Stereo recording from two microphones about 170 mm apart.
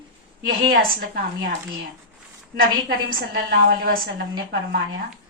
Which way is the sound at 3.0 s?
65° right (ahead or behind).